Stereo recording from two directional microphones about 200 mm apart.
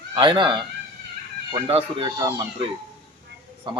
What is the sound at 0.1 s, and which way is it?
Speech, 20° right (ahead or behind).